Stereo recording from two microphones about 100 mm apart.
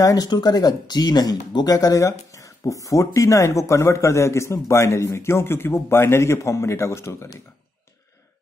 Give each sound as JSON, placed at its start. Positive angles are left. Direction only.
{"t": 0.0, "sound": "speech", "side_deg": 40}